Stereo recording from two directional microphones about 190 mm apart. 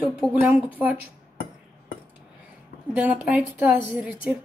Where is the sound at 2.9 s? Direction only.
10° right (ahead or behind).